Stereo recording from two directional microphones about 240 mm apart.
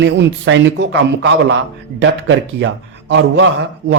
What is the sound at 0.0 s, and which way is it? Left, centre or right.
Speech, right.